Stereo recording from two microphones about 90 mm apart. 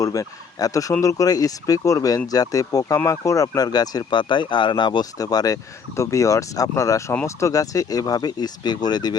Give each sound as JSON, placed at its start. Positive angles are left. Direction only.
{"t": 0.0, "sound": "speech", "side_deg": 40}
{"t": 5.1, "sound": "speech", "side_deg": 45}